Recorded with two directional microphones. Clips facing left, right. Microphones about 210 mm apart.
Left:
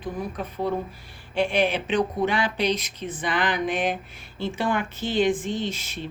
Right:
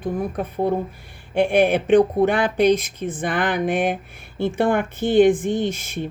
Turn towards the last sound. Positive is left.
turn(degrees=-50)  # may be behind; listen again after turning